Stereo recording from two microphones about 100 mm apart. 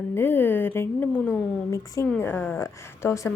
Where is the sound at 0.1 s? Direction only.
20° left (ahead or behind).